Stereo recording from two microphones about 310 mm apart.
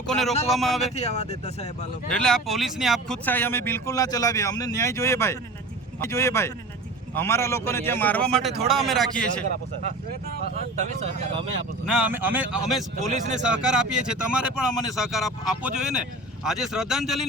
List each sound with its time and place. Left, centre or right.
0.1 s speech: centre
0.9 s speech: left
2.0 s speech: centre
10.5 s speech: right
11.9 s speech: centre
13.0 s speech: right
13.3 s speech: centre